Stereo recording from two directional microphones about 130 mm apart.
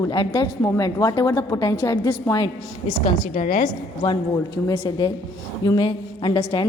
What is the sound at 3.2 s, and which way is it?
Speech, 90° left.